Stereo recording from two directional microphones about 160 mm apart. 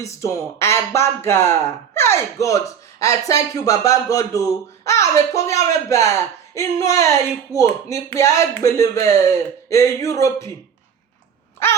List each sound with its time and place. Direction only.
0.0 s speech: 20° left (ahead or behind)